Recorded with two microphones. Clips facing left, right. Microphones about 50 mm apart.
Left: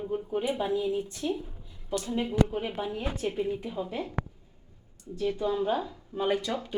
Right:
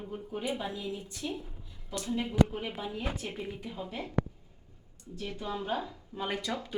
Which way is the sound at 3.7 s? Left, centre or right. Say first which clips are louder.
Left 5 dB; left.